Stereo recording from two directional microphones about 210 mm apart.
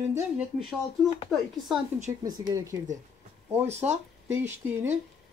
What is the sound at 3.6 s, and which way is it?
Speech, 30° right (ahead or behind).